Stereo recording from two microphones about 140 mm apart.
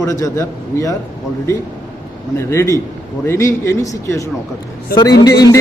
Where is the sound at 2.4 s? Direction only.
20° left (ahead or behind).